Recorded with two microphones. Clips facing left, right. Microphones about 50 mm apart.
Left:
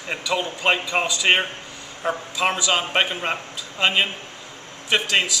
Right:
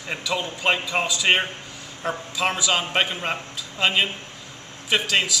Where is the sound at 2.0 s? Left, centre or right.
Centre.